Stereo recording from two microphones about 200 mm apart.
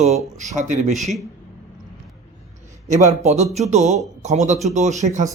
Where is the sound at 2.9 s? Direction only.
35° right (ahead or behind).